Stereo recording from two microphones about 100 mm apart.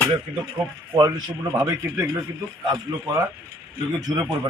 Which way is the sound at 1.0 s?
35° right (ahead or behind).